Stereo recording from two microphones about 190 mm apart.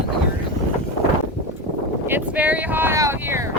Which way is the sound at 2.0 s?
10° right (ahead or behind).